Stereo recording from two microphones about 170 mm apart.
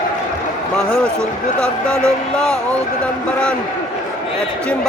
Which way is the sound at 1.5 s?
5° left (ahead or behind).